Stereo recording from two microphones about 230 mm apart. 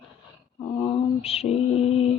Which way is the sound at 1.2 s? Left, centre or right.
Left.